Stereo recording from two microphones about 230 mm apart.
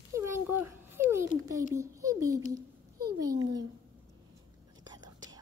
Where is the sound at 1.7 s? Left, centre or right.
Centre.